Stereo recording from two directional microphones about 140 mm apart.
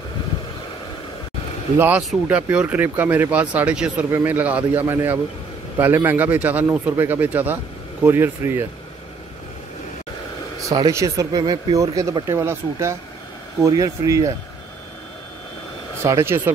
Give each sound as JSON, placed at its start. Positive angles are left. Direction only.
{"t": 1.8, "sound": "speech", "side_deg": -10}
{"t": 10.6, "sound": "speech", "side_deg": -25}
{"t": 16.0, "sound": "speech", "side_deg": -20}